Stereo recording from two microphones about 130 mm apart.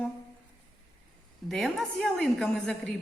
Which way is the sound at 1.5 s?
Centre (ahead or behind).